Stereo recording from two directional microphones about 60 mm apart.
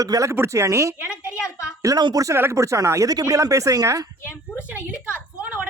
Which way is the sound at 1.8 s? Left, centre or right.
Right.